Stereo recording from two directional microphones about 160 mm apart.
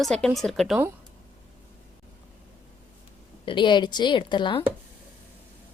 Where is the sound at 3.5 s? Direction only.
30° left (ahead or behind).